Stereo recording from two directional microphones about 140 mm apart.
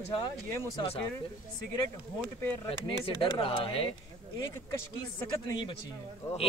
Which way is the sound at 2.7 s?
40° left (ahead or behind).